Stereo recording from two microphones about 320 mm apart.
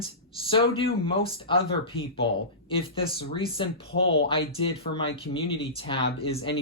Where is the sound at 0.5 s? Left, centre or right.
Centre.